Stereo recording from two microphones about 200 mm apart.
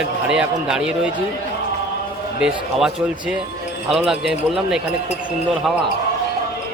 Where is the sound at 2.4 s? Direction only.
5° right (ahead or behind).